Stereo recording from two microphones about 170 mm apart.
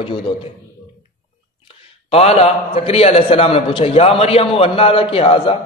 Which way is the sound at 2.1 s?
35° left (ahead or behind).